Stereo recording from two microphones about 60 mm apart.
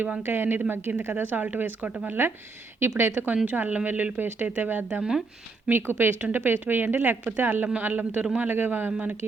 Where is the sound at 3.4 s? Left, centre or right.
Right.